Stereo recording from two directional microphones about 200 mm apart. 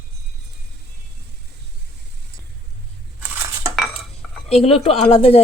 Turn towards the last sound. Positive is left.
turn(degrees=30)  # may be behind; listen again after turning